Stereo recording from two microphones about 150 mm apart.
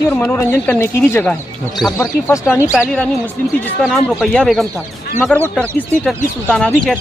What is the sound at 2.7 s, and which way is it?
Speech, 5° right (ahead or behind).